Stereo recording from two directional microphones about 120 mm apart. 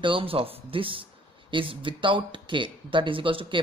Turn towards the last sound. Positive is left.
turn(degrees=-45)  # may be behind; listen again after turning